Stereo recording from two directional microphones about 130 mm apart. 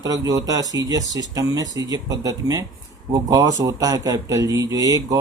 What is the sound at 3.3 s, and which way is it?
Speech, 25° right (ahead or behind).